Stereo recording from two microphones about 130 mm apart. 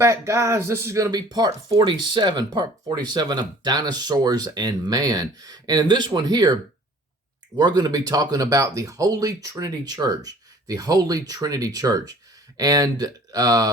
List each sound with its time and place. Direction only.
0.0 s speech: 20° right (ahead or behind)
1.1 s speech: 30° right (ahead or behind)